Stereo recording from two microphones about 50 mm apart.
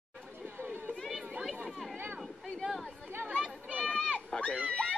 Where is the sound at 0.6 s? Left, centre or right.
Right.